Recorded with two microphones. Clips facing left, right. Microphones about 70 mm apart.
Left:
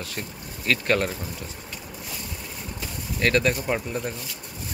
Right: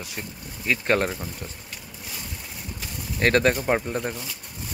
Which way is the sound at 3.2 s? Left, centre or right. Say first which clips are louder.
Right 2 dB; right.